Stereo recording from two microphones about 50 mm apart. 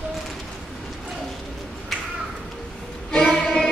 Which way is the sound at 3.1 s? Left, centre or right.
Centre.